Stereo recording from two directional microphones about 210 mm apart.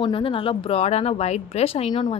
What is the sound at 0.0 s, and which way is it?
Speech, 25° left (ahead or behind).